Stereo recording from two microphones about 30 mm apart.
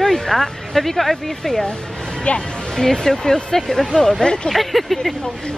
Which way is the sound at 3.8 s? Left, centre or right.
Left.